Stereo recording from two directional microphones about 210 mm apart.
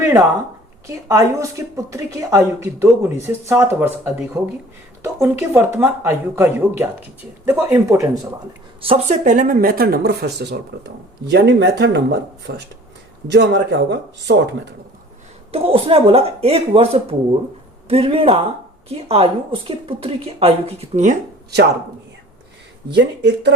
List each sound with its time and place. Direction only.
0.9 s a woman's voice: 15° right (ahead or behind)
8.8 s a woman's voice: 25° right (ahead or behind)
9.2 s speech: 40° right (ahead or behind)
13.3 s speech: 55° right (ahead or behind)
15.5 s a woman's voice: 25° right (ahead or behind)
22.9 s speech: 55° right (ahead or behind)